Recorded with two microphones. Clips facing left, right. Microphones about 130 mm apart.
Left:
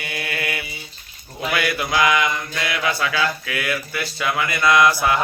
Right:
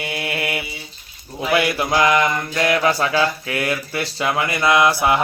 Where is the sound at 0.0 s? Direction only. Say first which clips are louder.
Right 3 dB; 25° right (ahead or behind).